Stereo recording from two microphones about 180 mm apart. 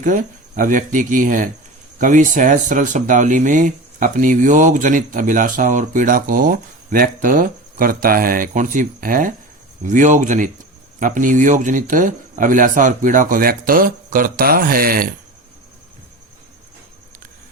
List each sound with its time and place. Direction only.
0.0 s speech: 45° right (ahead or behind)